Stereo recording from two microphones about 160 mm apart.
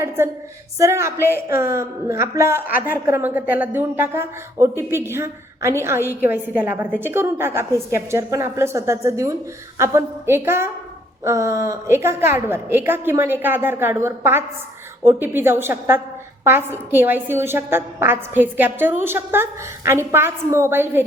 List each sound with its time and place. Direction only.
0.2 s a woman's voice: 15° right (ahead or behind)